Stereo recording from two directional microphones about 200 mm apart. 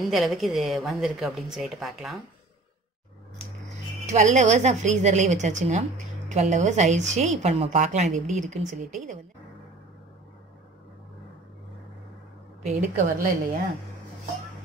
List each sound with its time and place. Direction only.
0.0 s a woman's voice: centre (ahead or behind)
4.0 s a woman's voice: 35° right (ahead or behind)
12.6 s a woman's voice: 35° right (ahead or behind)